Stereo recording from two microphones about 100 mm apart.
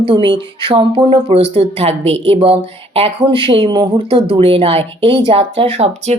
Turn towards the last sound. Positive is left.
turn(degrees=-90)